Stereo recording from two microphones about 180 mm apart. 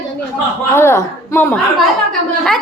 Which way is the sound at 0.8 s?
15° left (ahead or behind).